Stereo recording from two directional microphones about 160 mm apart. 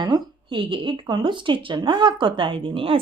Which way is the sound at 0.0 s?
30° right (ahead or behind).